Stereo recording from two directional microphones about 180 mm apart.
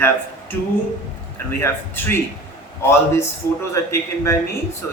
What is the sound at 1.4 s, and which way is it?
Speech, 15° left (ahead or behind).